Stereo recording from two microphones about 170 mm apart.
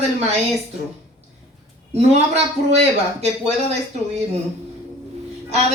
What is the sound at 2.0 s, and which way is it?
Speech, 40° right (ahead or behind).